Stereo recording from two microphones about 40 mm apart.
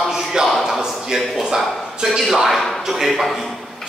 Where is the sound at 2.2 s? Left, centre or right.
Centre.